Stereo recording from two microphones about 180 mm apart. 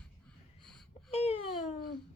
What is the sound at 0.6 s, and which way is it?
Wheeze, 5° left (ahead or behind).